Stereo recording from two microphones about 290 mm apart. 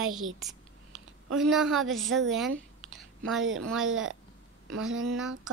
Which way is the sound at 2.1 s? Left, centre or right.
Right.